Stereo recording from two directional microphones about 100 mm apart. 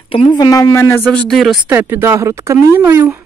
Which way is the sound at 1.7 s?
25° right (ahead or behind).